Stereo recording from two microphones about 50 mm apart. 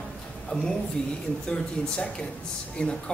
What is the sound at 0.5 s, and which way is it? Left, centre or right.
Speech, left.